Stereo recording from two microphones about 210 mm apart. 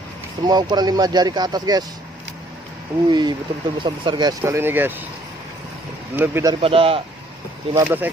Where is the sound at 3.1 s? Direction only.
20° right (ahead or behind).